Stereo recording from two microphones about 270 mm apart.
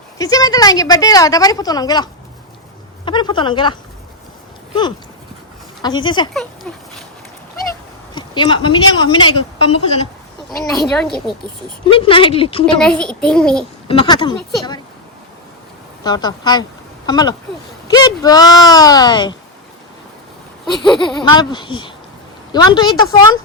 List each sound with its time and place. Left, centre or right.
0.2 s a woman's voice: centre
6.3 s speech: centre
8.1 s a woman's voice: centre
10.6 s a child's voice: centre
11.9 s speech: centre
12.8 s a child's voice: centre
13.8 s speech: centre
16.0 s a woman's voice: centre
20.8 s a child's voice: centre
21.2 s a woman's voice: centre